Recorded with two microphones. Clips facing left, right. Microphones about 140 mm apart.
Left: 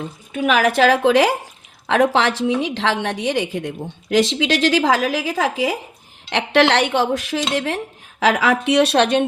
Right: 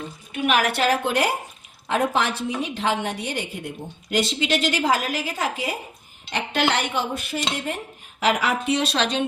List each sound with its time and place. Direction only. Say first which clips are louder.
0.8 s a woman's voice: left 7 dB; 90° left
6.3 s a woman's voice: left 7 dB; 80° left; by 9.2 s 60° left (ahead or behind)